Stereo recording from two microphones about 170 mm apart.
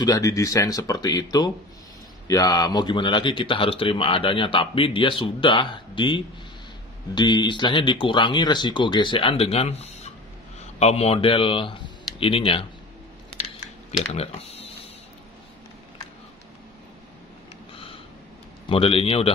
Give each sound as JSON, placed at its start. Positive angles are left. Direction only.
{"t": 0.0, "sound": "speech", "side_deg": 20}
{"t": 14.1, "sound": "speech", "side_deg": 40}
{"t": 18.7, "sound": "speech", "side_deg": 30}